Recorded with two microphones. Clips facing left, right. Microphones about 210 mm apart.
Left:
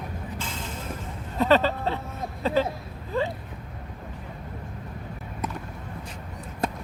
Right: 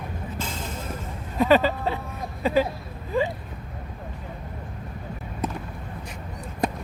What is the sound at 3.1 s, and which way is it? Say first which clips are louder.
Vehicle: right 3 dB; 15° right (ahead or behind).